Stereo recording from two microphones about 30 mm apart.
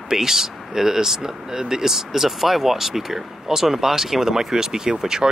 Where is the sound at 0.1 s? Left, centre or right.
Centre.